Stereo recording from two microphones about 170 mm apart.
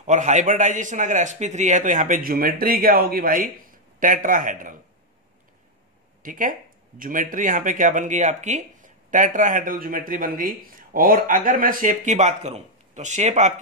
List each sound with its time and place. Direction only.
0.0 s speech: 45° right (ahead or behind)
6.2 s speech: 50° right (ahead or behind)